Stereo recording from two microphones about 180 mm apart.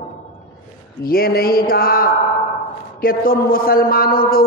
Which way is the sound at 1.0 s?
55° left (ahead or behind).